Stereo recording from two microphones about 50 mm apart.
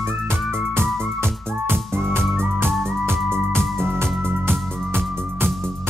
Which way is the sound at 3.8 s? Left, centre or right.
Right.